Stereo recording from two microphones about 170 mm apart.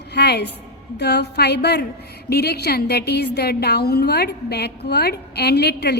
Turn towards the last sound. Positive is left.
turn(degrees=75)  # may be behind; listen again after turning